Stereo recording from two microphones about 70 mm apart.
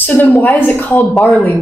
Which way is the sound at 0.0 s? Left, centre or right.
Left.